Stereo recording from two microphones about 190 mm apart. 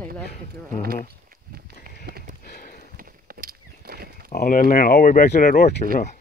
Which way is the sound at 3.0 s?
50° right (ahead or behind).